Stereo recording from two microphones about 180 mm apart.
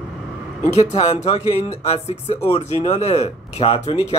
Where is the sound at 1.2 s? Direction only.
35° left (ahead or behind).